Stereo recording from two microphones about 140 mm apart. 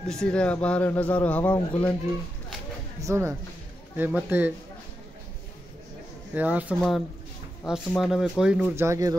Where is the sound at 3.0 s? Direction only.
20° right (ahead or behind).